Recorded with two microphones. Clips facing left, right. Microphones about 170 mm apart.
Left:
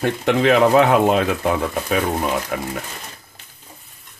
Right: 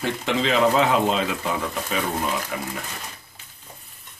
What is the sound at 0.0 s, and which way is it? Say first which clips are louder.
Speech: left 6 dB; 55° left (ahead or behind).